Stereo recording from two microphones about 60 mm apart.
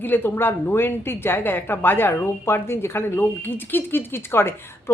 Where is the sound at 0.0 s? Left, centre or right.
Left.